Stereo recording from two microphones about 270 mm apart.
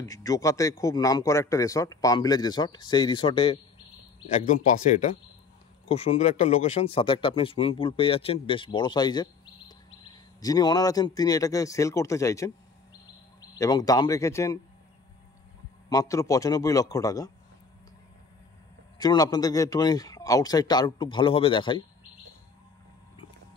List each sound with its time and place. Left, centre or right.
0.0 s speech: centre
15.9 s speech: centre
18.9 s speech: centre